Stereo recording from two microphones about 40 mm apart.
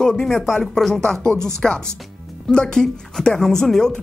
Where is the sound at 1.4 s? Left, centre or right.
Centre.